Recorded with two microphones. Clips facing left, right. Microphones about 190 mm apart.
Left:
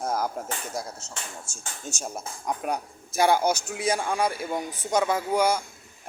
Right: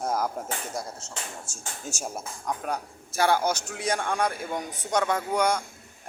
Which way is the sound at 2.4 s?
15° left (ahead or behind).